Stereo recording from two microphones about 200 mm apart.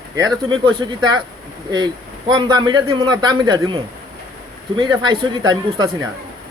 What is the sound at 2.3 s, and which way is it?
A man's voice, 20° right (ahead or behind).